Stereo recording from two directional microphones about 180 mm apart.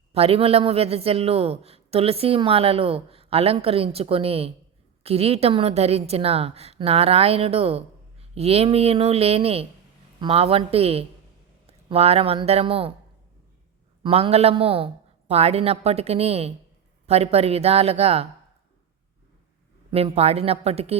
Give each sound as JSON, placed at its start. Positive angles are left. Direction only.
{"t": 0.1, "sound": "a woman's voice", "side_deg": -35}
{"t": 14.0, "sound": "a woman's voice", "side_deg": -35}
{"t": 19.9, "sound": "a woman's voice", "side_deg": -35}